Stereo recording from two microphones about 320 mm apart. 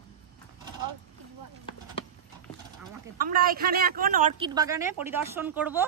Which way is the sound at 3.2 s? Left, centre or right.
Right.